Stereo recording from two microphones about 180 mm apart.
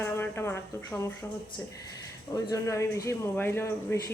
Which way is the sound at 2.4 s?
15° left (ahead or behind).